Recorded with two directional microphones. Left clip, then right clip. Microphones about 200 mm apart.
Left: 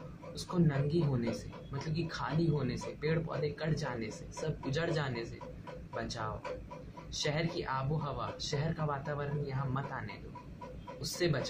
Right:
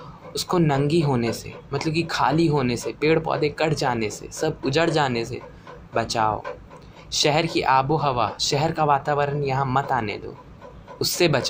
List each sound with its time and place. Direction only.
0.3 s speech: 30° right (ahead or behind)